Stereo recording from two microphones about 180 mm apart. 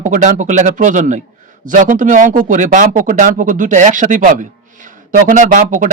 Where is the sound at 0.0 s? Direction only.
45° right (ahead or behind).